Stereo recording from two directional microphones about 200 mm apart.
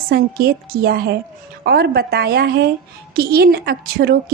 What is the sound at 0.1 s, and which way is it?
A woman's voice, 50° right (ahead or behind).